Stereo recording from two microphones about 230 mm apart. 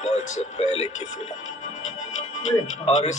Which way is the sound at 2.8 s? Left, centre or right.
Left.